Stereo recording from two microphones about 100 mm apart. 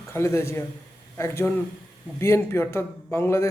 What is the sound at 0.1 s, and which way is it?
A man's voice, 25° left (ahead or behind).